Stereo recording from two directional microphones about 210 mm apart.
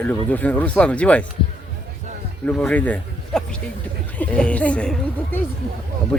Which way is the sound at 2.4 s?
5° left (ahead or behind).